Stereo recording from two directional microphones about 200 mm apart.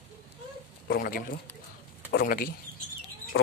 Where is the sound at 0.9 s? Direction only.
45° left (ahead or behind).